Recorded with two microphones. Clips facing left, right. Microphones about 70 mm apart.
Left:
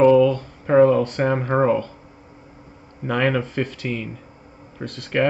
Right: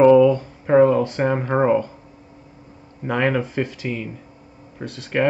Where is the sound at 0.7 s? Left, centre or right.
Centre.